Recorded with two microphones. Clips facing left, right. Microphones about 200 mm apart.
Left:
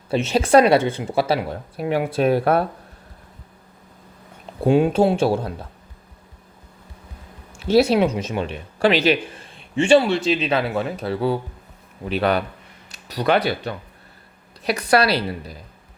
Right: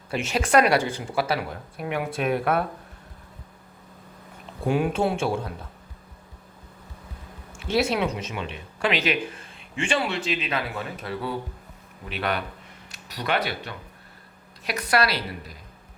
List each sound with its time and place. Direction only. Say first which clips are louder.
0.1 s speech: left 6 dB; 30° left (ahead or behind)
4.6 s speech: left 7 dB; 25° left (ahead or behind)
7.7 s speech: left 8 dB; 35° left (ahead or behind)